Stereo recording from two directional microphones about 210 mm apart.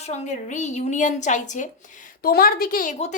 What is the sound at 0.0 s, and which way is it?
A woman's voice, 35° left (ahead or behind).